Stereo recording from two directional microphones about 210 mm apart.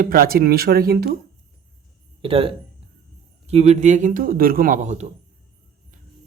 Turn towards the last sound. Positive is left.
turn(degrees=-35)  # may be behind; listen again after turning